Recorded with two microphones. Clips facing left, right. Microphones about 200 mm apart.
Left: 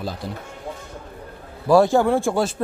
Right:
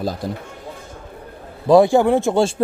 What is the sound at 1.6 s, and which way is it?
Speech, 15° right (ahead or behind).